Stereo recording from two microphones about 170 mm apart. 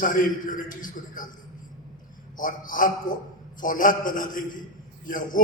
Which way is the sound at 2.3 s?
50° left (ahead or behind).